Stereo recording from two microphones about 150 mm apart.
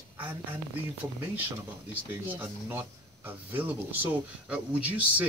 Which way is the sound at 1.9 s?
10° right (ahead or behind).